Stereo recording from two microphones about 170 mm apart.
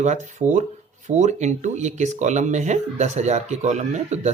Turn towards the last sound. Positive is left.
turn(degrees=-40)  # may be behind; listen again after turning